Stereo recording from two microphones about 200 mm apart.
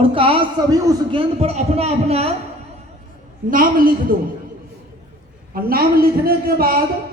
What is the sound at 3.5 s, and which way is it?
Speech, 45° right (ahead or behind).